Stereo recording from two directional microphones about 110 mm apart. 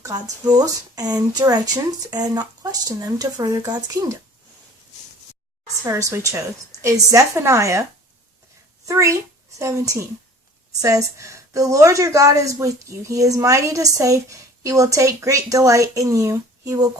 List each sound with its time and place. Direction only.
0.0 s a woman's voice: 30° right (ahead or behind)
5.8 s speech: 25° right (ahead or behind)
8.9 s a woman's voice: 30° right (ahead or behind)